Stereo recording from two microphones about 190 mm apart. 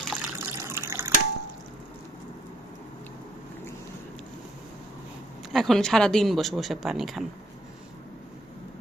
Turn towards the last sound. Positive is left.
turn(degrees=0)  # may be behind; listen again after turning